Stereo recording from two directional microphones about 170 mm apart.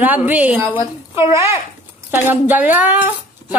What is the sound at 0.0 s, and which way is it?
Speech, 10° right (ahead or behind).